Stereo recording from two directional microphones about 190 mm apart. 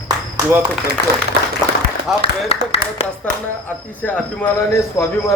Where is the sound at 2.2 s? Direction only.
30° left (ahead or behind).